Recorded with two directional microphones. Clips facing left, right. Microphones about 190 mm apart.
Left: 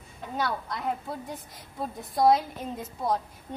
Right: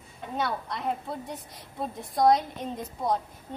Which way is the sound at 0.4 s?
Centre (ahead or behind).